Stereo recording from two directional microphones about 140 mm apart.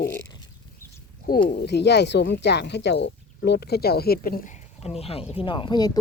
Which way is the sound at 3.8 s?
90° left.